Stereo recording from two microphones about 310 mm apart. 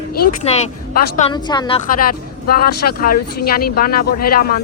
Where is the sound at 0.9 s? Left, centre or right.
Centre.